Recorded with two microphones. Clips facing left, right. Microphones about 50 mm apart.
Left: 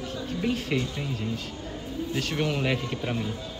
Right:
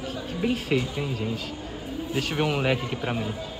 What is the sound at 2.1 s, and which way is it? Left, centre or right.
Speech, centre.